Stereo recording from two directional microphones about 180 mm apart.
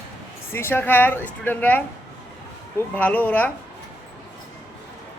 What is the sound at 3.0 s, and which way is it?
Speech, 10° left (ahead or behind).